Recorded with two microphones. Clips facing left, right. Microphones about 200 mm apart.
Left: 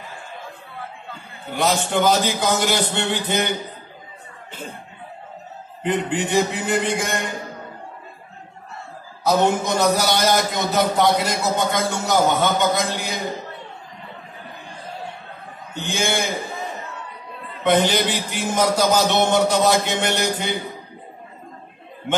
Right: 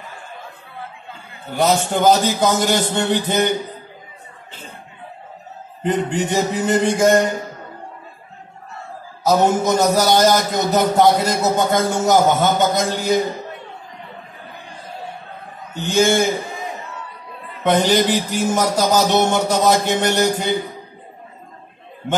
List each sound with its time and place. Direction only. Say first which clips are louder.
1.5 s music: right 3 dB; 45° right (ahead or behind)
5.8 s music: right 3 dB; 45° right (ahead or behind)
9.4 s music: right 3 dB; 45° right (ahead or behind)
15.7 s music: right 8 dB; 45° right (ahead or behind)
17.6 s music: right 3 dB; 45° right (ahead or behind)